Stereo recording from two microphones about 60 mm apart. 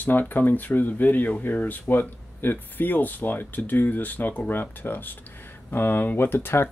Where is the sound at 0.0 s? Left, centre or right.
Left.